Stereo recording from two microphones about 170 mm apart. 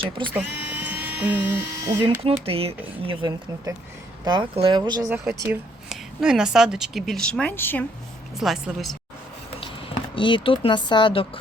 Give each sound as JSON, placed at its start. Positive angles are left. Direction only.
{"t": 0.3, "sound": "speech", "side_deg": -10}
{"t": 2.2, "sound": "speech", "side_deg": -35}
{"t": 5.0, "sound": "speech", "side_deg": -10}
{"t": 5.9, "sound": "speech", "side_deg": -5}
{"t": 8.4, "sound": "speech", "side_deg": 0}
{"t": 10.2, "sound": "speech", "side_deg": 30}